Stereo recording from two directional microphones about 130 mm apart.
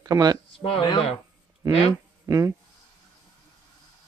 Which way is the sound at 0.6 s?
45° left (ahead or behind).